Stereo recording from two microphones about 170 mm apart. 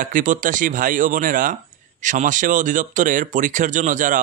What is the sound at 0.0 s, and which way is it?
Speech, 50° right (ahead or behind).